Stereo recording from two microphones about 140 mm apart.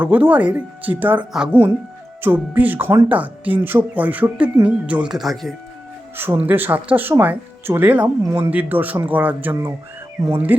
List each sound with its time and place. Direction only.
0.0 s speech: 10° right (ahead or behind)
6.1 s speech: 15° right (ahead or behind)